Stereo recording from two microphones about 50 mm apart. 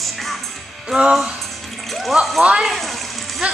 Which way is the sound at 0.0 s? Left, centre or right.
Centre.